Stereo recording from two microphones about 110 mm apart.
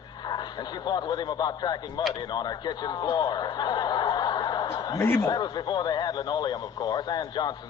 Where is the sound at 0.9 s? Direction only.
40° left (ahead or behind).